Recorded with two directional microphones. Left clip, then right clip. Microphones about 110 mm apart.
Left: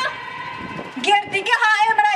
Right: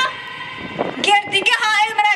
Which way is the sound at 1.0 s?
25° right (ahead or behind).